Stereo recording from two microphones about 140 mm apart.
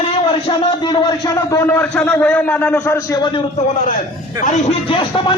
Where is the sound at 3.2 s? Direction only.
35° left (ahead or behind).